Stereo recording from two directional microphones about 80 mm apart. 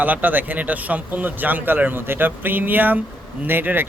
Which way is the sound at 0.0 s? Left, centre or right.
Right.